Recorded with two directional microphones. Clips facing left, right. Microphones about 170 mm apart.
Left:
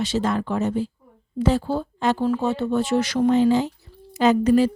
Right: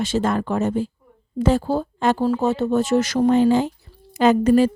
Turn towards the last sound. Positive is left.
turn(degrees=-50)  # may be behind; listen again after turning